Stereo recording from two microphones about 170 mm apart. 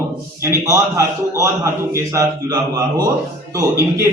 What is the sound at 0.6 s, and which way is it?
A man's voice, 20° right (ahead or behind).